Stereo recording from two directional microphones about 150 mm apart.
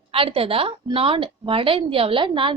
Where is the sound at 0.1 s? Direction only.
40° right (ahead or behind).